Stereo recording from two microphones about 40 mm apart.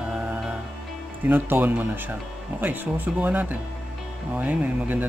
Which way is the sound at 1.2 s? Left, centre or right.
Right.